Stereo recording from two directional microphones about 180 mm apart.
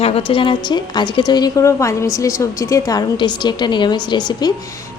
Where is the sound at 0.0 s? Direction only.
30° left (ahead or behind).